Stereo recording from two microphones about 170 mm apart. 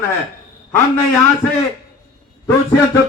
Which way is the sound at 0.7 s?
15° left (ahead or behind).